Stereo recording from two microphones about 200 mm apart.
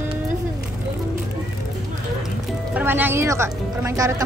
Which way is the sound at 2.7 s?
10° right (ahead or behind).